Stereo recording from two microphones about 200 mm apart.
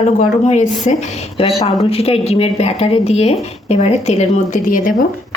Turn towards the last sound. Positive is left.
turn(degrees=45)  # may be behind; listen again after turning